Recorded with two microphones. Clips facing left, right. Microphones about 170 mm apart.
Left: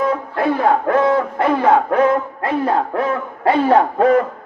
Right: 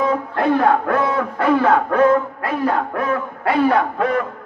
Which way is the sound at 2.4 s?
25° left (ahead or behind).